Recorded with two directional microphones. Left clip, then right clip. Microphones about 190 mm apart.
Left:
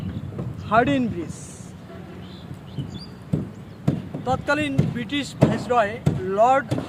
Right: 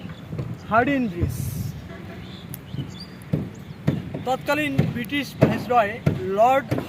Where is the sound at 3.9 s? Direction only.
75° left (ahead or behind).